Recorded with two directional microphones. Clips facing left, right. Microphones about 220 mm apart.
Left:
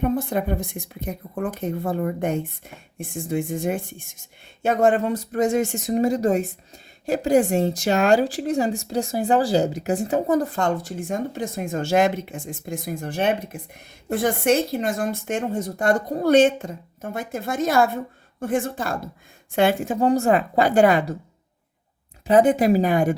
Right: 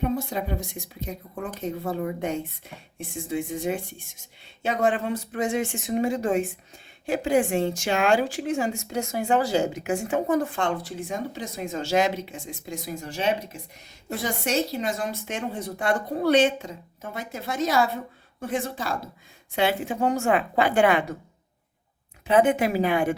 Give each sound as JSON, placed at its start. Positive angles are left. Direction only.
{"t": 0.0, "sound": "a woman's voice", "side_deg": 50}
{"t": 22.3, "sound": "a woman's voice", "side_deg": 35}